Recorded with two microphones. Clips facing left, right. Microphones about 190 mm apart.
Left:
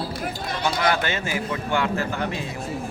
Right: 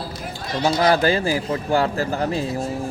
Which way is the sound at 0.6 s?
35° right (ahead or behind).